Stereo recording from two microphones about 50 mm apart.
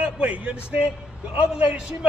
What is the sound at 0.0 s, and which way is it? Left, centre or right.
Speech, right.